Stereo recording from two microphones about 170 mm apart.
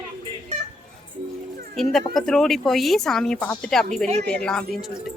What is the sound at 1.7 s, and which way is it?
Speech, centre (ahead or behind).